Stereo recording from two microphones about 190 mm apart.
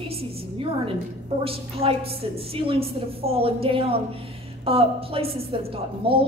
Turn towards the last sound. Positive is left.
turn(degrees=-30)  # may be behind; listen again after turning